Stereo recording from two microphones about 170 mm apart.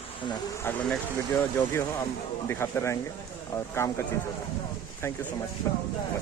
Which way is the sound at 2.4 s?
15° left (ahead or behind).